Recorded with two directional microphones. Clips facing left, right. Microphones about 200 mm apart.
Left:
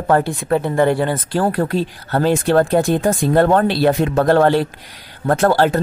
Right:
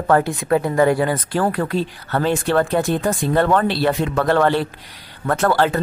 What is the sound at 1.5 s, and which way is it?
Speech, 35° left (ahead or behind).